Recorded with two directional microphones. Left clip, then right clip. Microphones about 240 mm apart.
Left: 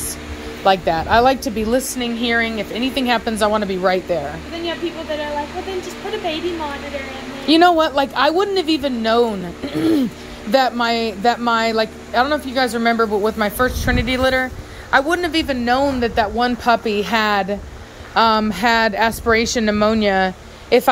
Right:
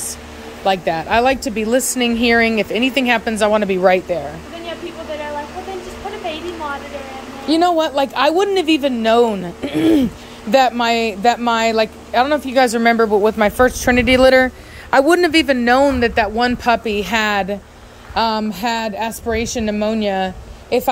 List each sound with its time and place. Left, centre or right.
0.7 s a woman's voice: centre
2.0 s a woman's voice: centre
7.4 s a woman's voice: centre